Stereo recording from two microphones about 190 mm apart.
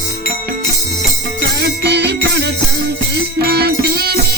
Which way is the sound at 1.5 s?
60° right (ahead or behind).